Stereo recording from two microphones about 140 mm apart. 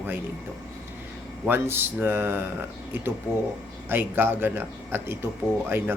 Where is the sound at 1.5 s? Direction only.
15° right (ahead or behind).